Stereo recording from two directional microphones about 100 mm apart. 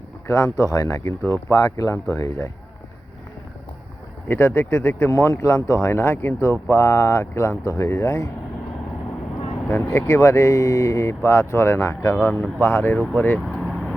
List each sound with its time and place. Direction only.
0.3 s speech: 35° left (ahead or behind)
4.3 s speech: 25° left (ahead or behind)
9.6 s speech: 25° left (ahead or behind)
13.6 s vehicle: 5° right (ahead or behind)